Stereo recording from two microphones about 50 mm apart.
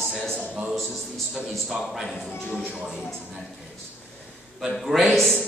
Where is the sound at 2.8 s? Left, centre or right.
Centre.